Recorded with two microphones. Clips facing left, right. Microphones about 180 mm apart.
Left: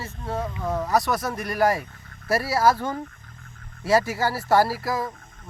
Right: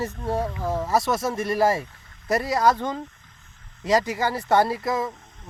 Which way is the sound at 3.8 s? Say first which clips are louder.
Left 1 dB; 15° right (ahead or behind).